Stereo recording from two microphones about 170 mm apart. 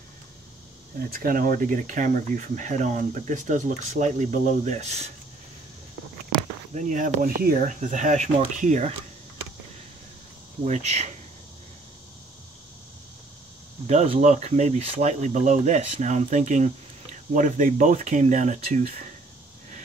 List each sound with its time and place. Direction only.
0.9 s speech: 60° right (ahead or behind); by 5.1 s 40° right (ahead or behind)
6.7 s speech: 50° right (ahead or behind)
10.6 s speech: 40° right (ahead or behind)
13.8 s speech: 40° right (ahead or behind)